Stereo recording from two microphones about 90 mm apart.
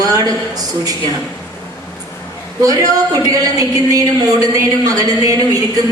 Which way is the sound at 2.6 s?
40° right (ahead or behind).